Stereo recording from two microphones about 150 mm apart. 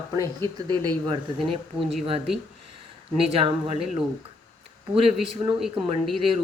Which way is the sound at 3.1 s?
40° right (ahead or behind).